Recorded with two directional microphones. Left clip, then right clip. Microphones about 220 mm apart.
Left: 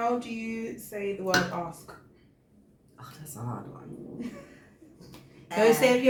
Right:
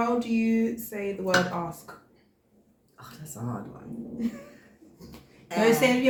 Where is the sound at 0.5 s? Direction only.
50° right (ahead or behind).